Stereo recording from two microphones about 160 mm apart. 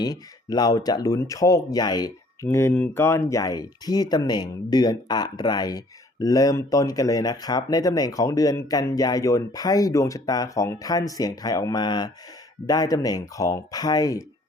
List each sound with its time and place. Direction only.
0.0 s speech: 25° left (ahead or behind)